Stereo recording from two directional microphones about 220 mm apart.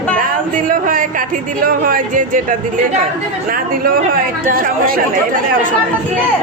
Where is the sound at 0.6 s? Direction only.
40° right (ahead or behind).